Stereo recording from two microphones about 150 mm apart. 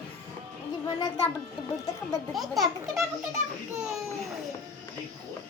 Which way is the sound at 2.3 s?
Centre (ahead or behind).